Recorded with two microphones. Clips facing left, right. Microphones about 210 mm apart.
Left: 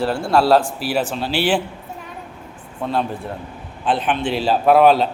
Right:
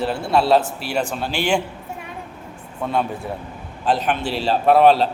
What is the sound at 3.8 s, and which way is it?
Speech, 40° right (ahead or behind).